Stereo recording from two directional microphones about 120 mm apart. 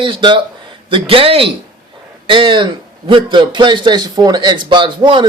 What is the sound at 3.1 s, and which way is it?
A man's voice, 45° right (ahead or behind).